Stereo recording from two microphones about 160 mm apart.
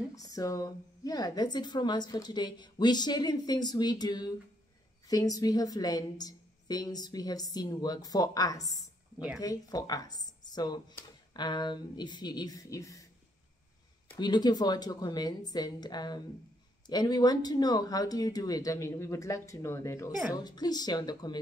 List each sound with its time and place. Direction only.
0.1 s speech: 20° left (ahead or behind)
14.1 s speech: 25° left (ahead or behind)